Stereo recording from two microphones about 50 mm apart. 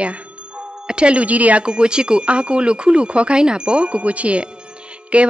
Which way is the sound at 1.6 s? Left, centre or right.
Centre.